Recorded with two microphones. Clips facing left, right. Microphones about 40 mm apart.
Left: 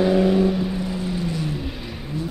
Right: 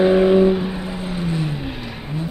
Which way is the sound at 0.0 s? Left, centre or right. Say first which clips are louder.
Right 4 dB; right.